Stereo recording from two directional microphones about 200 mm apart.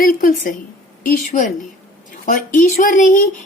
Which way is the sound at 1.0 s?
40° left (ahead or behind).